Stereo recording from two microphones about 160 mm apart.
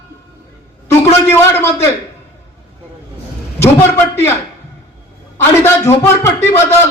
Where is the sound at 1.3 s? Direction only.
15° left (ahead or behind).